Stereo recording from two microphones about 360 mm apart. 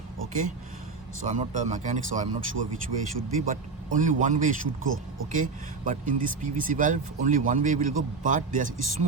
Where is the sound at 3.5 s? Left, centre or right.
Right.